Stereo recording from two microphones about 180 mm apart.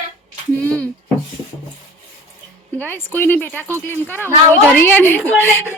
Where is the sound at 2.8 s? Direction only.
10° left (ahead or behind).